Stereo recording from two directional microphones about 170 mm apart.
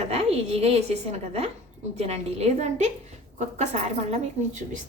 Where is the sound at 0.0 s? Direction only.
40° right (ahead or behind).